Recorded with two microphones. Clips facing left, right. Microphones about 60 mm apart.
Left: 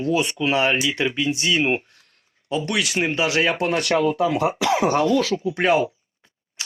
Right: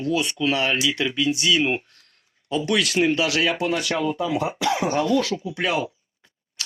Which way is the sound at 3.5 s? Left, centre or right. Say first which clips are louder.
Left 2 dB; left.